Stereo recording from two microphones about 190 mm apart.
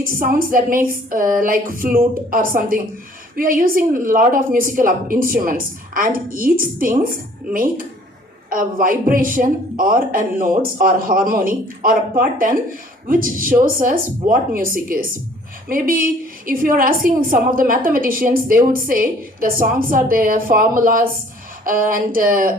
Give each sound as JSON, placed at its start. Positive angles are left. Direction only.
{"t": 0.0, "sound": "a woman's voice", "side_deg": -50}